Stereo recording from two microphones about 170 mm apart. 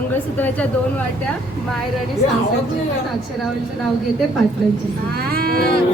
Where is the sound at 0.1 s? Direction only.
10° left (ahead or behind).